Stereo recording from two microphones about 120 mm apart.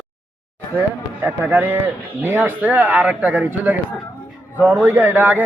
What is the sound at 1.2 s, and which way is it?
Speech, 15° right (ahead or behind).